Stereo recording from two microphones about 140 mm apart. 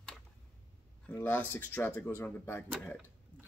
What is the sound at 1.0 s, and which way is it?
Speech, 15° left (ahead or behind).